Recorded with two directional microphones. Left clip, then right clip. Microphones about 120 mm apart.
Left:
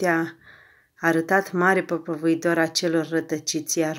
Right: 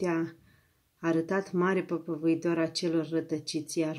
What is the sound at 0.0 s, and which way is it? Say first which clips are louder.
Speech: left 8 dB; 25° right (ahead or behind).